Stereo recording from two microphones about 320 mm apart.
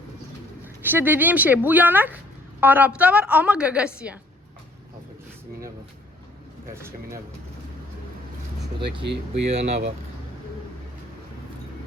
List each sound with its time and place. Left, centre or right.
0.9 s a woman's voice: centre
9.3 s speech: right